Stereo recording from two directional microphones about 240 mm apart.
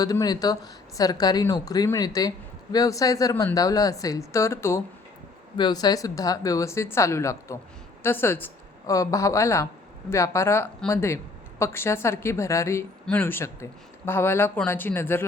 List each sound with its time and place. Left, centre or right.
0.0 s a woman's voice: centre